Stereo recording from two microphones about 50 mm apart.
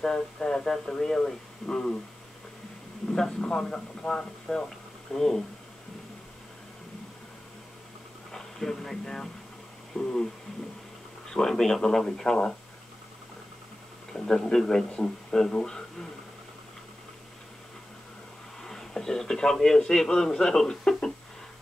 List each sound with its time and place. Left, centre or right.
0.0 s speech: centre
3.1 s speech: centre
8.3 s speech: centre
9.9 s a sound: left
11.3 s speech: centre
14.1 s speech: centre
18.6 s a man's voice: centre